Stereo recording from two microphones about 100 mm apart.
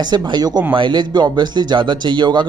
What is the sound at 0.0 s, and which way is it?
Speech, 45° right (ahead or behind).